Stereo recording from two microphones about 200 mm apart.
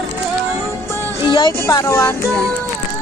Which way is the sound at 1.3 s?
20° left (ahead or behind).